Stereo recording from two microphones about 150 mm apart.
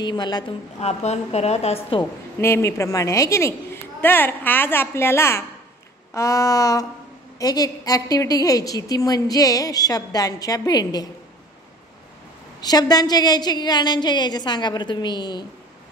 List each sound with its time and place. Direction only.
0.0 s a woman's voice: 30° left (ahead or behind)
0.7 s a woman's voice: 45° left (ahead or behind)
2.4 s a woman's voice: 20° left (ahead or behind)
12.5 s a woman's voice: 25° left (ahead or behind)